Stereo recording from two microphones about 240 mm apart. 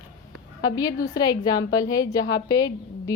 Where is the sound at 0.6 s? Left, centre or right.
Centre.